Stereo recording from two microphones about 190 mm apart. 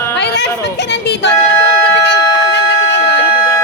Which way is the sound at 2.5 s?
65° left (ahead or behind).